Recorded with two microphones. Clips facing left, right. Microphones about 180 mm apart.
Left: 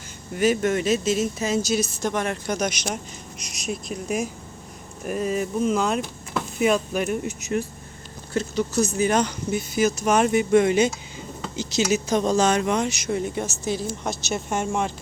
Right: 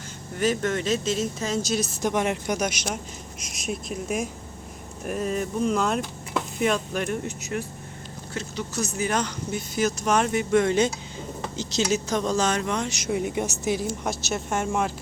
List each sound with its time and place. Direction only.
0.3 s speech: 10° left (ahead or behind)
2.0 s a woman's voice: 15° right (ahead or behind); by 7.3 s 10° left (ahead or behind)
8.3 s speech: 40° left (ahead or behind)
8.8 s speech: 20° left (ahead or behind)
13.0 s a woman's voice: 10° right (ahead or behind)